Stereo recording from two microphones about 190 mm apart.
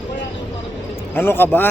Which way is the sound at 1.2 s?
10° left (ahead or behind).